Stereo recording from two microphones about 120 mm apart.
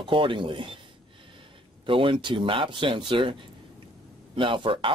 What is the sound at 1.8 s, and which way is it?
Speech, 45° right (ahead or behind).